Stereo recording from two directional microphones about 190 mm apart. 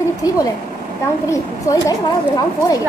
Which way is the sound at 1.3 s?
15° left (ahead or behind).